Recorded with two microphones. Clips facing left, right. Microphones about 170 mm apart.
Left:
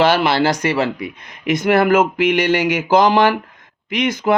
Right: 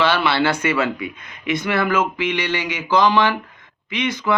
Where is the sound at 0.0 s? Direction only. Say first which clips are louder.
Left 4 dB; 45° left (ahead or behind).